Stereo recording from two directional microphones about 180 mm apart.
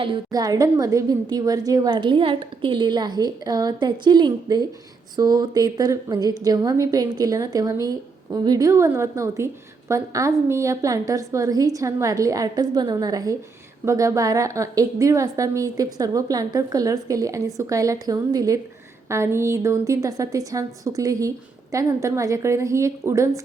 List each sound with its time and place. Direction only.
0.0 s a woman's voice: 25° right (ahead or behind)